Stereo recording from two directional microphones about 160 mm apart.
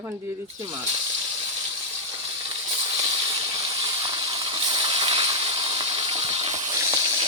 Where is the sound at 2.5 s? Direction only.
30° right (ahead or behind).